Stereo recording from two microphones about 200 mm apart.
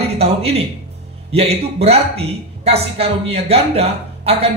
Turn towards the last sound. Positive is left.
turn(degrees=-30)  # may be behind; listen again after turning